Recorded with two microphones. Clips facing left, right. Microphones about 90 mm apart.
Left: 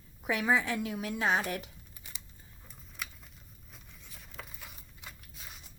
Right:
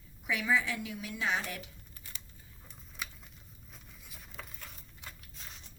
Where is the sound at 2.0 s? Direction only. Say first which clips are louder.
Even; 15° left (ahead or behind).